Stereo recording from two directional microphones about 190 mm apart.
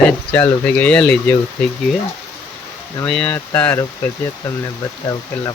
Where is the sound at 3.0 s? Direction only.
5° left (ahead or behind).